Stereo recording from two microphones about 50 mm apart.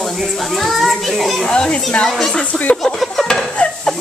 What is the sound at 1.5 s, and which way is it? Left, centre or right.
Speech, centre.